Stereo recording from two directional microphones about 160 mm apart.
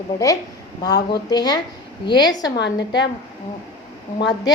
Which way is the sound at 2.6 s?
90° left.